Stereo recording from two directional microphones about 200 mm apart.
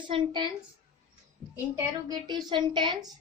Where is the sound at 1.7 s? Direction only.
20° right (ahead or behind).